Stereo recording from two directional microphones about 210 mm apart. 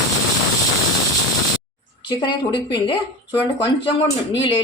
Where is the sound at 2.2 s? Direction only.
20° left (ahead or behind).